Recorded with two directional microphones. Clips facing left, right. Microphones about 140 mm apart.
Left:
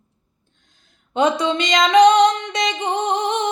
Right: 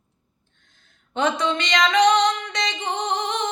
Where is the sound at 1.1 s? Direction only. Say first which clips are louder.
Left 4 dB; 20° left (ahead or behind).